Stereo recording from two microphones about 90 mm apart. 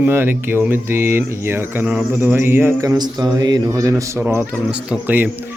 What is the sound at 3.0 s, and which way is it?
A man's voice, 50° right (ahead or behind).